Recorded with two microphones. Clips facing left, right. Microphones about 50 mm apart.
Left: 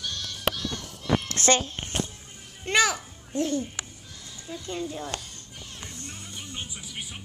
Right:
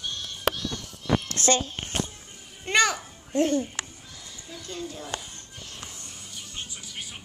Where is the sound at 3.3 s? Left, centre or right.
Right.